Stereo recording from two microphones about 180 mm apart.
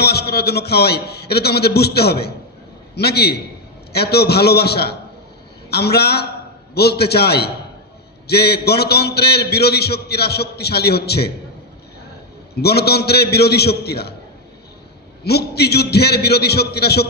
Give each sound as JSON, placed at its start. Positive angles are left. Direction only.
{"t": 0.0, "sound": "a man's voice", "side_deg": 65}
{"t": 12.6, "sound": "a man's voice", "side_deg": 65}
{"t": 15.2, "sound": "a man's voice", "side_deg": 65}